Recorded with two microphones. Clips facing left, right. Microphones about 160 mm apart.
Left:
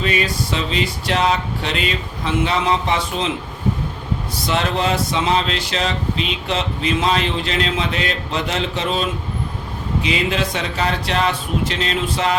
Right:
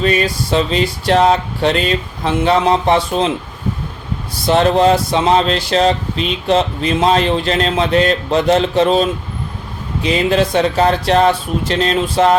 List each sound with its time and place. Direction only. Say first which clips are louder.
0.0 s speech: right 5 dB; 40° right (ahead or behind)
4.4 s speech: right 9 dB; 40° right (ahead or behind)